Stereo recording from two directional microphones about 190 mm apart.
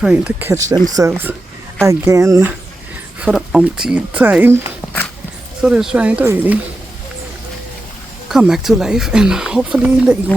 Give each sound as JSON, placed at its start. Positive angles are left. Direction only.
{"t": 0.0, "sound": "speech", "side_deg": -5}
{"t": 3.2, "sound": "speech", "side_deg": -5}
{"t": 5.6, "sound": "speech", "side_deg": -5}
{"t": 8.3, "sound": "speech", "side_deg": 0}